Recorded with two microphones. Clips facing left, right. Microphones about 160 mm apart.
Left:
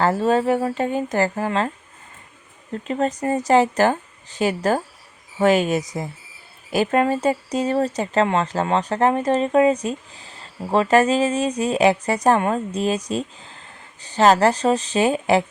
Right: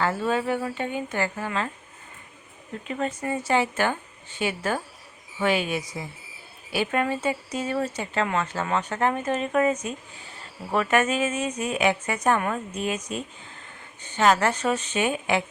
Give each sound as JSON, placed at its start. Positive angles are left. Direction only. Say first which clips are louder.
{"t": 0.0, "sound": "speech", "louder": "left 6 dB", "side_deg": 40}
{"t": 2.8, "sound": "speech", "louder": "left 7 dB", "side_deg": 35}